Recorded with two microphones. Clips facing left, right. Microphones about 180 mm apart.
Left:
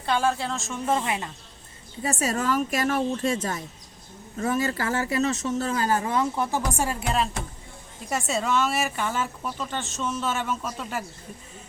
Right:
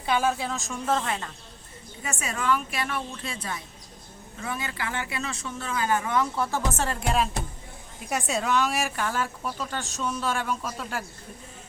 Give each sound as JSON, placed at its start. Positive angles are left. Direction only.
{"t": 0.0, "sound": "speech", "side_deg": -5}
{"t": 2.0, "sound": "speech", "side_deg": 35}